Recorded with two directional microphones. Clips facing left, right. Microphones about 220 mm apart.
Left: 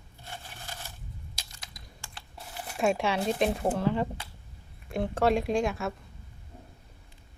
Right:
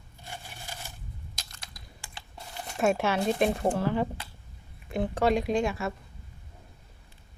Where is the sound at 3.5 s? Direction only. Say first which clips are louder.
Right 1 dB; 5° left (ahead or behind).